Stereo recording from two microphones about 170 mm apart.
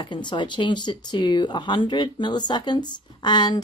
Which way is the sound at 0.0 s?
25° left (ahead or behind).